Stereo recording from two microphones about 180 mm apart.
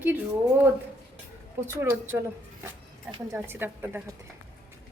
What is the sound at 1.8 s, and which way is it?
Speech, 15° right (ahead or behind).